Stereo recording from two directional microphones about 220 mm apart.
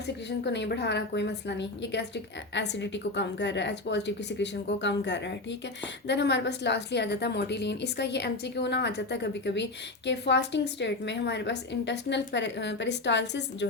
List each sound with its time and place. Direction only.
0.3 s a woman's voice: 50° left (ahead or behind)